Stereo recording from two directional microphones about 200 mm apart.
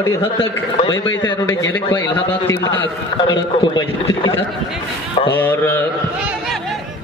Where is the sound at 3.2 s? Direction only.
25° left (ahead or behind).